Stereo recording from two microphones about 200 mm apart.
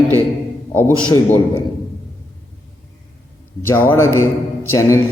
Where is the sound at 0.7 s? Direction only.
10° left (ahead or behind).